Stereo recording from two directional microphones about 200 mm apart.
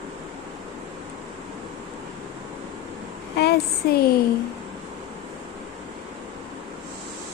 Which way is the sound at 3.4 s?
50° left (ahead or behind).